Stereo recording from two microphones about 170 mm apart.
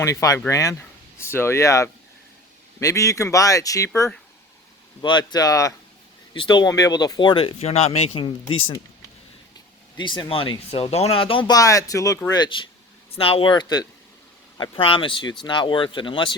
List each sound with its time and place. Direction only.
0.0 s speech: 20° left (ahead or behind); by 8.8 s 35° left (ahead or behind)
10.0 s speech: 30° left (ahead or behind)